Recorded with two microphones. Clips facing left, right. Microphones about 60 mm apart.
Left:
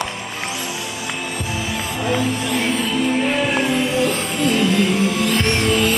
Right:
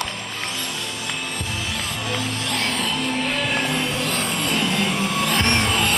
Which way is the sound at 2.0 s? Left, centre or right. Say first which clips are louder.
Left 8 dB; centre.